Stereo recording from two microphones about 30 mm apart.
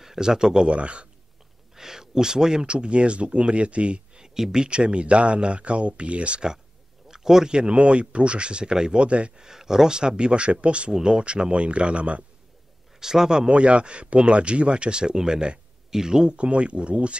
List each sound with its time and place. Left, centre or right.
0.0 s speech: centre
0.7 s speech: right
1.8 s a sound: centre
2.6 s speech: right
4.2 s speech: centre
4.6 s speech: right
7.1 s a sound: centre
7.5 s speech: right
9.4 s speech: centre
9.9 s speech: right
10.9 s speech: right
13.0 s speech: centre
13.5 s speech: right
16.3 s speech: right